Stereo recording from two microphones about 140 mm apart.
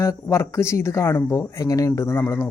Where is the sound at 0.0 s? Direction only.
20° left (ahead or behind).